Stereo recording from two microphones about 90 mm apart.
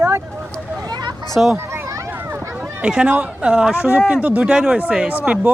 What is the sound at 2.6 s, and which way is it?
Speech, 10° right (ahead or behind).